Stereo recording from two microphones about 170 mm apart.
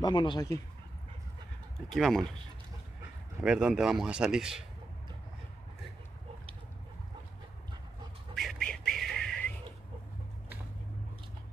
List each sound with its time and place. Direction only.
0.0 s speech: 30° left (ahead or behind)
2.0 s speech: centre (ahead or behind)
3.4 s speech: 5° right (ahead or behind)
8.4 s a sound: centre (ahead or behind)